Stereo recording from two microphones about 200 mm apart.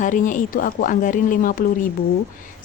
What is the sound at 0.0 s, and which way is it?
Speech, 40° left (ahead or behind).